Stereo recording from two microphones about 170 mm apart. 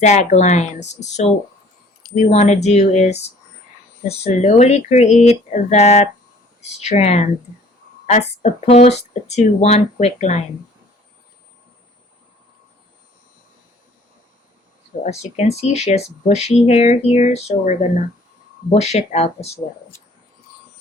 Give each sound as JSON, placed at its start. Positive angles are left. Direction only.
{"t": 0.0, "sound": "speech", "side_deg": 45}
{"t": 15.0, "sound": "speech", "side_deg": 40}